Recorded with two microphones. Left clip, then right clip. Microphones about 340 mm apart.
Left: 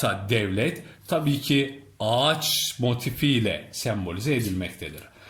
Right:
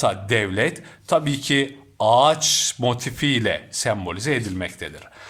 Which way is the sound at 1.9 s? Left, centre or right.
Right.